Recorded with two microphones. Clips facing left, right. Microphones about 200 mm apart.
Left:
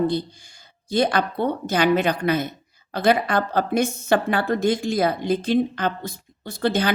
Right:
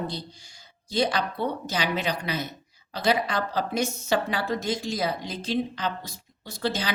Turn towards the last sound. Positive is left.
turn(degrees=55)  # may be behind; listen again after turning